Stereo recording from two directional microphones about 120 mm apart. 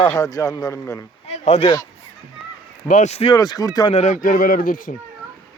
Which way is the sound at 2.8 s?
80° left.